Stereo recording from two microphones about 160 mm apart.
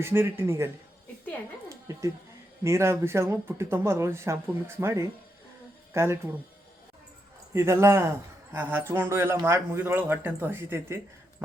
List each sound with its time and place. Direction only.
0.0 s speech: 15° right (ahead or behind)
1.7 s music: 20° right (ahead or behind)
2.6 s speech: 15° right (ahead or behind)
7.5 s speech: 15° right (ahead or behind)